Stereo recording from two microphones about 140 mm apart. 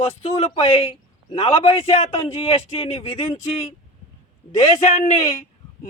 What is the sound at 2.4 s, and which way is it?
Speech, 45° left (ahead or behind).